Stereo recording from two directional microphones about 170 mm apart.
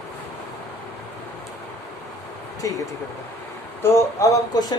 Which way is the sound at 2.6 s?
20° left (ahead or behind).